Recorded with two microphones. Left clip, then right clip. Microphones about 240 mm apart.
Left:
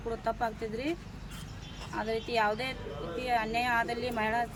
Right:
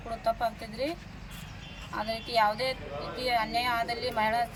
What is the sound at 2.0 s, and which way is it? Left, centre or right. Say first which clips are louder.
A man's voice: right 3 dB; centre.